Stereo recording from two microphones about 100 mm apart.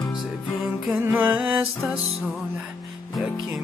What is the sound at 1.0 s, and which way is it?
Music, 20° right (ahead or behind).